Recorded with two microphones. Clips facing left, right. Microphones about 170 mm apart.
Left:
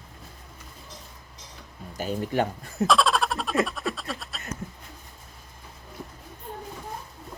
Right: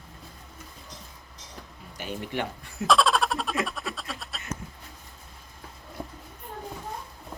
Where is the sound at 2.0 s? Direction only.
40° left (ahead or behind).